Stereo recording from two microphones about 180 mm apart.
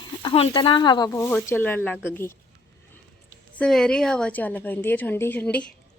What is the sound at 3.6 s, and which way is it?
A woman's voice, 5° left (ahead or behind).